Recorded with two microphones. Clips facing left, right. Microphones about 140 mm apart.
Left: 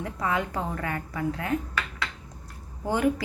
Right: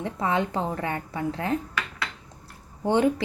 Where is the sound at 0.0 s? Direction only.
25° right (ahead or behind).